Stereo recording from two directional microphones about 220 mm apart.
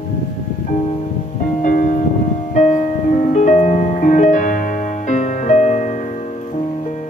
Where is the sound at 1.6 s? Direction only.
35° left (ahead or behind).